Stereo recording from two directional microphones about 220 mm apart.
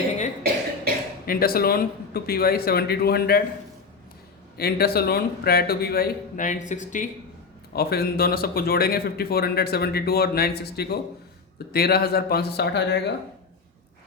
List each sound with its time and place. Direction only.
1.2 s speech: 45° left (ahead or behind)
4.5 s speech: 45° left (ahead or behind)
7.7 s speech: 45° left (ahead or behind)